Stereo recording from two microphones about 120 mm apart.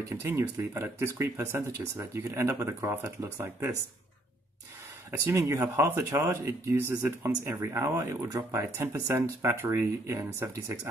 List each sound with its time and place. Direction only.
0.1 s speech: 20° right (ahead or behind)
5.2 s speech: 25° right (ahead or behind)